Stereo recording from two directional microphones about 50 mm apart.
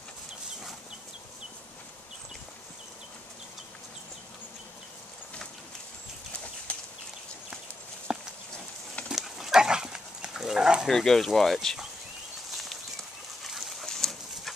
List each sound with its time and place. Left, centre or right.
6.7 s a sound: left
8.1 s a sound: centre
9.1 s dog: centre
10.9 s speech: centre
12.4 s bird flight: centre
13.4 s dog: centre
13.8 s livestock: centre